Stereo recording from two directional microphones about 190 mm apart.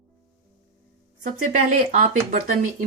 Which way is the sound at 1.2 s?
45° right (ahead or behind).